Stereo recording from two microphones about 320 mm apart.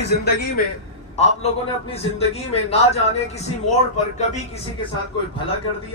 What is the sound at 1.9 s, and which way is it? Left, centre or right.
A man's voice, centre.